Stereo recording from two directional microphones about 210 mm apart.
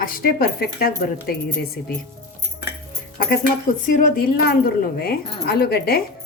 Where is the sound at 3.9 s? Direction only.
45° left (ahead or behind).